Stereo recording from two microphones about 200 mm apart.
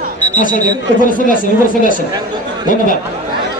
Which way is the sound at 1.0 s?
45° left (ahead or behind).